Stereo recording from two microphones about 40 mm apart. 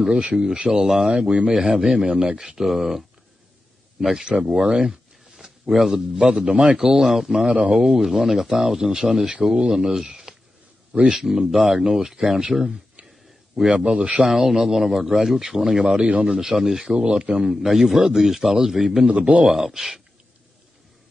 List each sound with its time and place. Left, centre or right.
0.1 s speech: right
1.5 s a man's voice: centre
2.6 s speech: centre; by 6.8 s right
6.8 s a man's voice: centre
13.7 s speech: right
14.2 s a man's voice: centre
16.8 s speech: right
17.4 s a man's voice: centre
19.0 s speech: right
19.4 s a man's voice: centre